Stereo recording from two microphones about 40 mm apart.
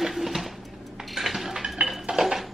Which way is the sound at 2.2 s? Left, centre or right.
Centre.